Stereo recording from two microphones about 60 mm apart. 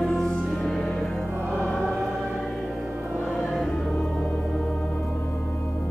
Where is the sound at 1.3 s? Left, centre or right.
Right.